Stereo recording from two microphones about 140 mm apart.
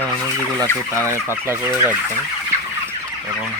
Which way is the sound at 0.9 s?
20° right (ahead or behind).